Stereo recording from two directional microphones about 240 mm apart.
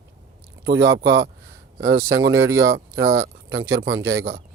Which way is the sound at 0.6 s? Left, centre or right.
Right.